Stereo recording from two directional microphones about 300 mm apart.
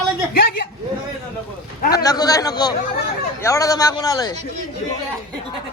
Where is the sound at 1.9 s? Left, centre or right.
Centre.